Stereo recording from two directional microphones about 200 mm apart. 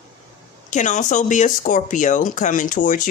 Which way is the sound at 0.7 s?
40° left (ahead or behind).